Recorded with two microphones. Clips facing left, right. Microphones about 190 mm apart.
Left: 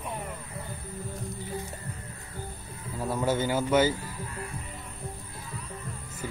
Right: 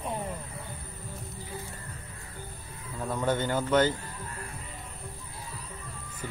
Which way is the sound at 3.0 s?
5° left (ahead or behind).